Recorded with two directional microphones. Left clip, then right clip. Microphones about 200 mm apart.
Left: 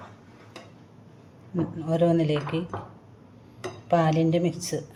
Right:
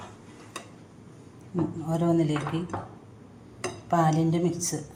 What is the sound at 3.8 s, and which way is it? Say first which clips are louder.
Speech: left 2 dB; 25° left (ahead or behind).